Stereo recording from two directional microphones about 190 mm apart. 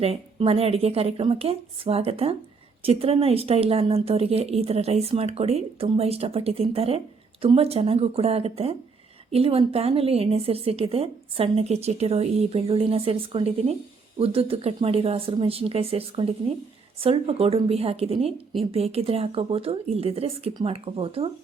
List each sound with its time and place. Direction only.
0.0 s a woman's voice: 30° right (ahead or behind)